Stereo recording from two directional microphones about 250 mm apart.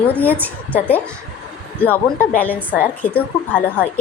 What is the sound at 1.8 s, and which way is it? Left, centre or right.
A woman's voice, centre.